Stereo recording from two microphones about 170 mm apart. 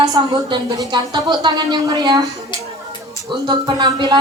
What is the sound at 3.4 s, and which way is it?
Speech, 25° right (ahead or behind).